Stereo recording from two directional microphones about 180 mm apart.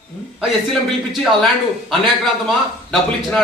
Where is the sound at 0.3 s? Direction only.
Centre (ahead or behind).